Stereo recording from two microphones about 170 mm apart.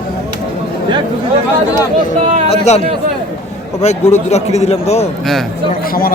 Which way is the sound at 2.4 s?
40° left (ahead or behind).